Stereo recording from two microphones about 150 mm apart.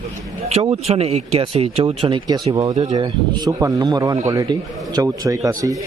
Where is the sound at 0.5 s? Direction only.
40° right (ahead or behind); by 5.7 s 20° right (ahead or behind).